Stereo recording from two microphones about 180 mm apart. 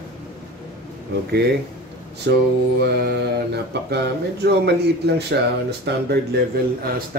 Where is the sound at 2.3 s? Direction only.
70° right (ahead or behind).